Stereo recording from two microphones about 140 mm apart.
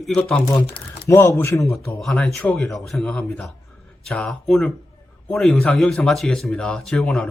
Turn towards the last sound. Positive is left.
turn(degrees=5)  # may be behind; listen again after turning